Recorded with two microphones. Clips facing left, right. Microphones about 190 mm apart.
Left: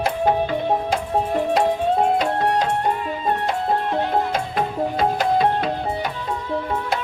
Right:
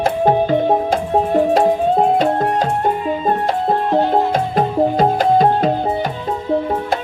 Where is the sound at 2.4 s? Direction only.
45° right (ahead or behind).